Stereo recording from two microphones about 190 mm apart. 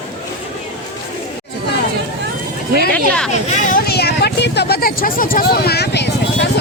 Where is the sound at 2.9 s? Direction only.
5° left (ahead or behind).